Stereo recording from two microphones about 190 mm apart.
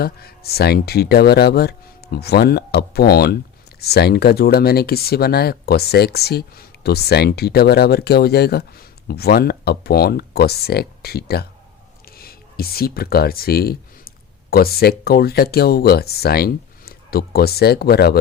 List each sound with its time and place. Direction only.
0.0 s speech: 55° left (ahead or behind)
12.0 s a sound: 55° left (ahead or behind)
14.5 s speech: 55° left (ahead or behind)